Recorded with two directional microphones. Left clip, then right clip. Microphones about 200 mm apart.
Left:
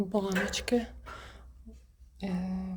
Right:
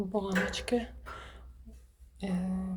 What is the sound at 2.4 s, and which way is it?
Speech, 10° left (ahead or behind).